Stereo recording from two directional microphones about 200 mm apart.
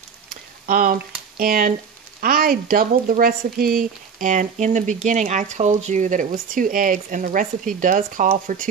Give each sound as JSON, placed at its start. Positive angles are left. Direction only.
{"t": 0.7, "sound": "speech", "side_deg": -40}